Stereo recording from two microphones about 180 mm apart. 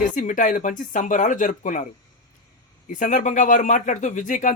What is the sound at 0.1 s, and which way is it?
Speech, 45° left (ahead or behind).